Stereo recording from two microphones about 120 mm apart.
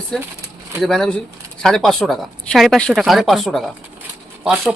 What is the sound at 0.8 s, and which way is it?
Speech, 5° left (ahead or behind).